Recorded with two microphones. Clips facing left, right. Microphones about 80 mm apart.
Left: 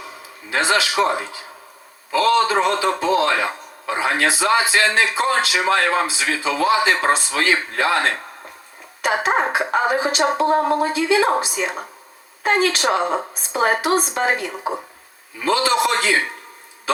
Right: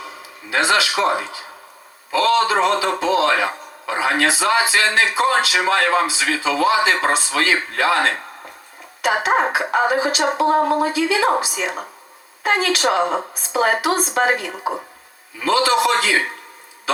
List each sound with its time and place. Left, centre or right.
0.5 s a man's voice: left